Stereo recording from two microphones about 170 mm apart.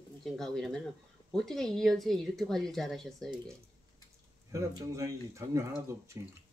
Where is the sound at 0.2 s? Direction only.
Centre (ahead or behind).